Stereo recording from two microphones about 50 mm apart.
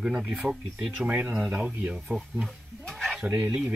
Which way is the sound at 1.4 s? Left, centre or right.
Centre.